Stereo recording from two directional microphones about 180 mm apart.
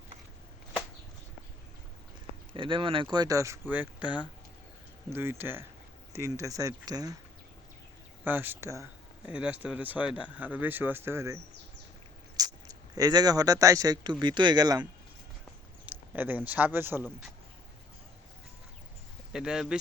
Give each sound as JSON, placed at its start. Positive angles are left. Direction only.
{"t": 2.5, "sound": "speech", "side_deg": -30}
{"t": 8.2, "sound": "speech", "side_deg": -10}
{"t": 12.4, "sound": "speech", "side_deg": -20}
{"t": 15.9, "sound": "speech", "side_deg": -10}
{"t": 19.3, "sound": "speech", "side_deg": -5}